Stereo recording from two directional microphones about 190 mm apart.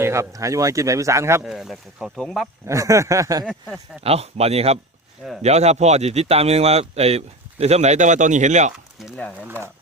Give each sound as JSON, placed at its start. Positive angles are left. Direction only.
{"t": 0.0, "sound": "speech", "side_deg": -15}
{"t": 1.5, "sound": "speech", "side_deg": 0}
{"t": 2.6, "sound": "speech", "side_deg": -15}
{"t": 3.4, "sound": "speech", "side_deg": 0}
{"t": 4.0, "sound": "speech", "side_deg": -30}
{"t": 9.0, "sound": "speech", "side_deg": 0}